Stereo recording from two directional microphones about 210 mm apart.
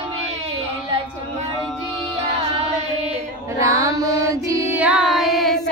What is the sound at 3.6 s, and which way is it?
Carnatic music, 15° right (ahead or behind).